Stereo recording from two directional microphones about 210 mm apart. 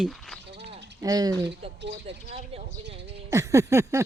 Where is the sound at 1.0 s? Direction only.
15° right (ahead or behind).